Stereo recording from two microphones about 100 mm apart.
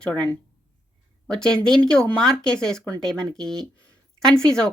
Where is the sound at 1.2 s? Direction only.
5° left (ahead or behind).